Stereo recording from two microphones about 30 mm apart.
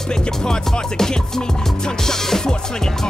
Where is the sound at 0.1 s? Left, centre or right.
Left.